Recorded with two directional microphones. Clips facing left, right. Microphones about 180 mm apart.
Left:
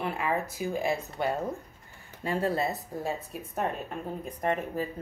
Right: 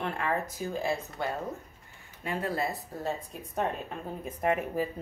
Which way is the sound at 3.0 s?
Centre (ahead or behind).